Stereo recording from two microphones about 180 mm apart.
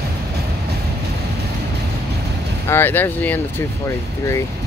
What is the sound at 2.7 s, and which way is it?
Speech, 10° left (ahead or behind).